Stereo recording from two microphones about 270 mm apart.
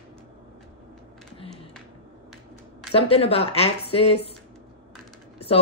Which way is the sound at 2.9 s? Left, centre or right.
Left.